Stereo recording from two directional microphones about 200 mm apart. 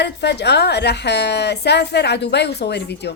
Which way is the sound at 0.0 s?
60° left (ahead or behind).